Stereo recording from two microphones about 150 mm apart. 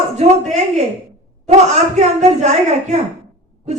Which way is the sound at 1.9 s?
50° right (ahead or behind).